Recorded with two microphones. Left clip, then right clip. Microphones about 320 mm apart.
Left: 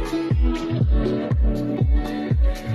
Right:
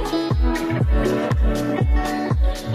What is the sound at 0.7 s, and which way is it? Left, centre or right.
Music, right.